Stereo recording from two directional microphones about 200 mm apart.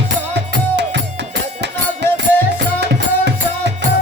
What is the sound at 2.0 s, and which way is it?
Music, 60° right (ahead or behind).